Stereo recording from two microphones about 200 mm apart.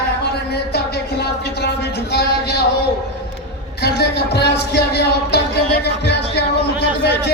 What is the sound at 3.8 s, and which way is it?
Speech, 55° left (ahead or behind).